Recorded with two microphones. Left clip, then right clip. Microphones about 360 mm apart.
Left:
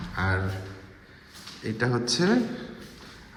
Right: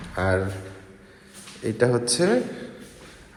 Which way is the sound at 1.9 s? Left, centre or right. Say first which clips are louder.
Right 4 dB; centre.